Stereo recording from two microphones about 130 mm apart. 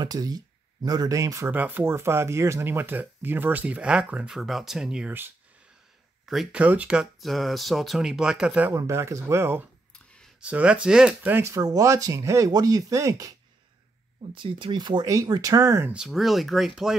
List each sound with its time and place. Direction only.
0.0 s speech: 30° right (ahead or behind)
9.9 s clicking: 5° left (ahead or behind)
10.4 s speech: 10° right (ahead or behind); by 13.3 s 25° right (ahead or behind)
14.3 s speech: 40° right (ahead or behind); by 15.9 s 20° right (ahead or behind)
15.9 s speech: 5° right (ahead or behind)